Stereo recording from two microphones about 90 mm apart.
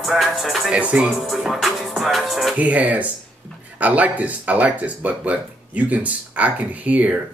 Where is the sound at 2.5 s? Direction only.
15° right (ahead or behind).